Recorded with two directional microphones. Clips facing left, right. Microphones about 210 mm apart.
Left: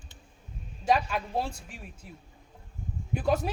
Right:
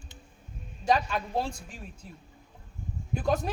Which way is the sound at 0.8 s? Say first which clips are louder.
Even; 5° left (ahead or behind).